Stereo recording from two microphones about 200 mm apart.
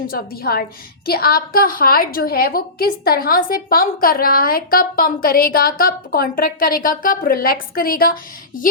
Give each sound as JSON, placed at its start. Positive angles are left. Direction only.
{"t": 0.1, "sound": "a woman's voice", "side_deg": 50}